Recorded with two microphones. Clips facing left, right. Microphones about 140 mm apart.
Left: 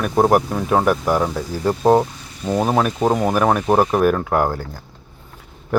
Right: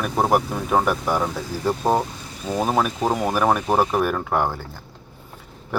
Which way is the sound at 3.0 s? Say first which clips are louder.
Left 4 dB; 20° left (ahead or behind).